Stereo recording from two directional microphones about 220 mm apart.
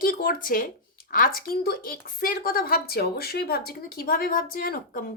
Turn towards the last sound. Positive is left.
turn(degrees=40)  # may be behind; listen again after turning